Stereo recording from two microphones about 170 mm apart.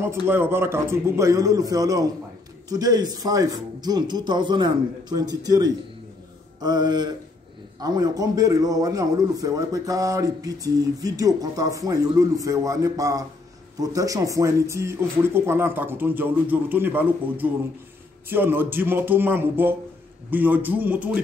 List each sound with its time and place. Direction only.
0.0 s a man's voice: 15° right (ahead or behind)